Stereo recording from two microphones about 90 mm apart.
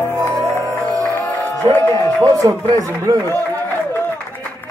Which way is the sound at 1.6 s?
50° right (ahead or behind).